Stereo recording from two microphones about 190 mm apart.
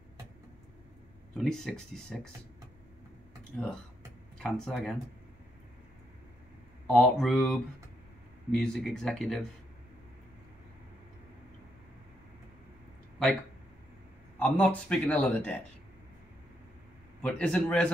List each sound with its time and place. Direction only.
1.3 s speech: 5° left (ahead or behind)
4.4 s speech: 5° left (ahead or behind)
6.9 s speech: 5° left (ahead or behind)
8.5 s speech: centre (ahead or behind)
14.4 s a man's voice: 5° left (ahead or behind)
17.2 s speech: 5° left (ahead or behind)